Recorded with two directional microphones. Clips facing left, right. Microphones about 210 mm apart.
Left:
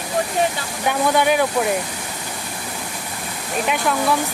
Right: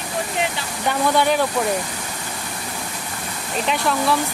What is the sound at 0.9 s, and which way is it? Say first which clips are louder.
Speech: left 1 dB; 5° left (ahead or behind).